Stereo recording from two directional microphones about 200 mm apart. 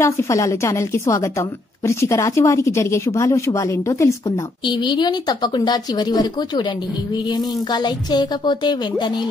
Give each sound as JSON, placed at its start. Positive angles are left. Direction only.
{"t": 0.0, "sound": "a woman's voice", "side_deg": 15}